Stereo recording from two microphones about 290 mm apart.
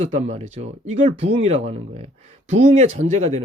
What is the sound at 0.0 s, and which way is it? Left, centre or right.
Speech, right.